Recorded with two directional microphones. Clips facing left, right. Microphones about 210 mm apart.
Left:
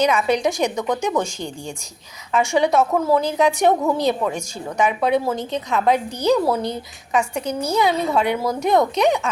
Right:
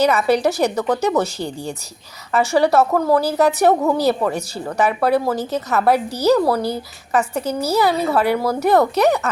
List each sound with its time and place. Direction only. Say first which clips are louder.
0.0 s a woman's voice: right 2 dB; 5° right (ahead or behind)